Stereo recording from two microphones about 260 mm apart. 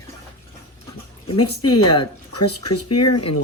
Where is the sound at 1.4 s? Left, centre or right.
Left.